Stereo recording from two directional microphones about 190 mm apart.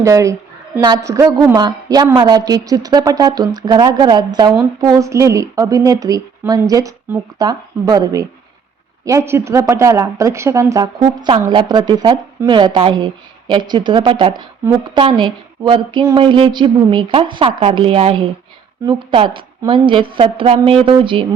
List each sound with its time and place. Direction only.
0.0 s a woman's voice: 15° right (ahead or behind)